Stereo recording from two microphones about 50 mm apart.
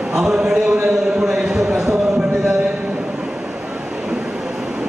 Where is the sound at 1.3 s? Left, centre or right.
Centre.